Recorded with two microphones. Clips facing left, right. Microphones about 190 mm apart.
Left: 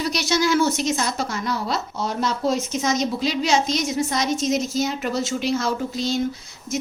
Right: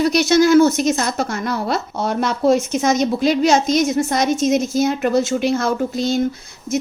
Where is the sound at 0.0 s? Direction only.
50° right (ahead or behind).